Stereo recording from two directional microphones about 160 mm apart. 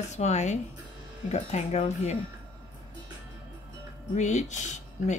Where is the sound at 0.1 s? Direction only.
45° left (ahead or behind).